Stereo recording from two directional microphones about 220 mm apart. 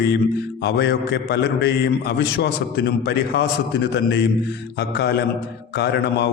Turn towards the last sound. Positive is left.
turn(degrees=50)  # may be behind; listen again after turning